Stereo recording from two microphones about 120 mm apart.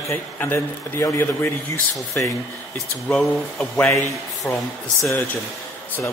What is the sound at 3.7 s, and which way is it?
Speech, 20° left (ahead or behind).